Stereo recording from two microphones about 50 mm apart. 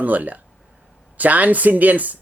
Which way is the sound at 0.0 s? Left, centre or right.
Right.